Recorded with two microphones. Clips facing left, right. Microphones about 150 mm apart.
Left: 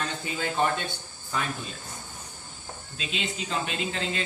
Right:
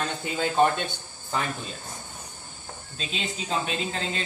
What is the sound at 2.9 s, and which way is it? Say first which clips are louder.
Speech: even; 40° right (ahead or behind).